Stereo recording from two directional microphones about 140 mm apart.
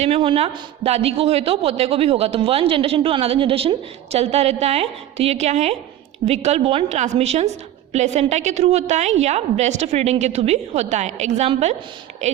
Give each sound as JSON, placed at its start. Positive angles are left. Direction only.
{"t": 0.0, "sound": "speech", "side_deg": -40}